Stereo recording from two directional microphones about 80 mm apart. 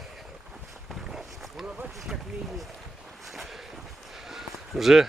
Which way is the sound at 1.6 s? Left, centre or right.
Centre.